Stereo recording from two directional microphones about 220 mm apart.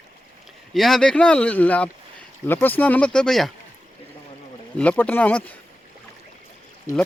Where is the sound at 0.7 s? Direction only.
Centre (ahead or behind).